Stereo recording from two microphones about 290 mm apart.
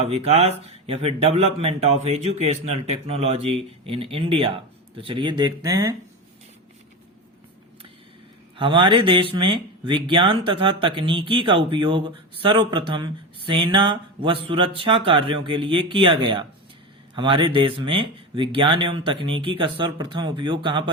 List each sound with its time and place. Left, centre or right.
0.0 s speech: right
8.5 s speech: centre